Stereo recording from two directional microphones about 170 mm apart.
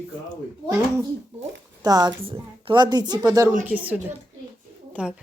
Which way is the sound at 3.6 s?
10° right (ahead or behind).